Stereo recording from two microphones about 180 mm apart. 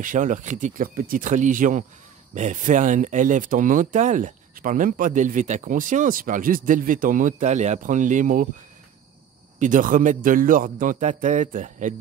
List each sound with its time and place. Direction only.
0.0 s speech: 45° right (ahead or behind)
9.6 s speech: 45° right (ahead or behind)